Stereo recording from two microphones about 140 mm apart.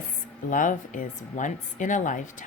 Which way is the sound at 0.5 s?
70° left (ahead or behind).